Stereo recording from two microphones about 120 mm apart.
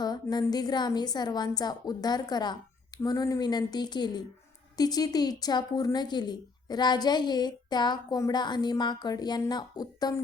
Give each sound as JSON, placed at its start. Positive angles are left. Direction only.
{"t": 0.0, "sound": "a woman's voice", "side_deg": 35}